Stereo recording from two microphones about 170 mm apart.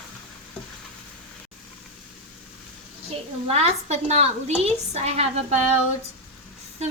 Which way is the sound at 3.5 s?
40° right (ahead or behind).